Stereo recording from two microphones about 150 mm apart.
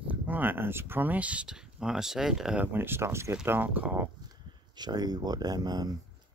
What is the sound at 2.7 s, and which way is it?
Speech, 15° right (ahead or behind).